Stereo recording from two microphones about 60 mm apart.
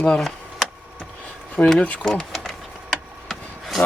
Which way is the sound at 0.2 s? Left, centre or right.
Centre.